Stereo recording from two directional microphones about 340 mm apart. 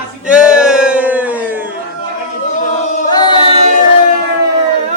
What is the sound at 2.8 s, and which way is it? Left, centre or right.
Choir, left.